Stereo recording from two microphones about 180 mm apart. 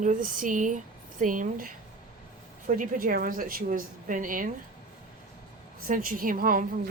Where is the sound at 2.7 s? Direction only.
50° right (ahead or behind).